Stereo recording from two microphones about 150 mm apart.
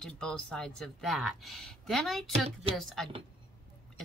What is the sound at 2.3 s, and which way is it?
Speech, 40° right (ahead or behind).